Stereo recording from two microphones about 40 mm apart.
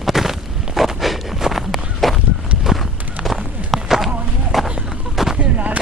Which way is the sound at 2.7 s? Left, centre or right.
Centre.